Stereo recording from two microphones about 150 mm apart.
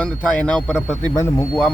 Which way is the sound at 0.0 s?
10° left (ahead or behind).